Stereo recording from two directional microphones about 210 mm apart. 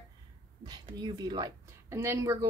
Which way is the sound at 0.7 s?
20° right (ahead or behind).